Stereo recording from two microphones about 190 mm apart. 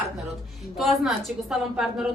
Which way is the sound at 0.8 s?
Centre (ahead or behind).